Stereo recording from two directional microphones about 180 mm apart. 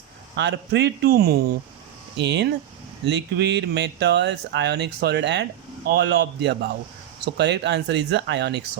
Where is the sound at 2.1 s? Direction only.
70° right (ahead or behind).